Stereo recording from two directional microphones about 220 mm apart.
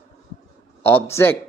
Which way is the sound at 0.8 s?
10° left (ahead or behind).